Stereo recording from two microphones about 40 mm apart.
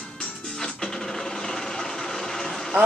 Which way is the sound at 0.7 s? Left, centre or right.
Centre.